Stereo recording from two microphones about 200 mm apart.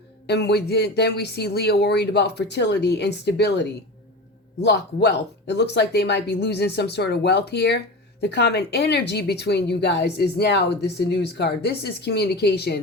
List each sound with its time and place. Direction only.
0.3 s speech: 55° left (ahead or behind)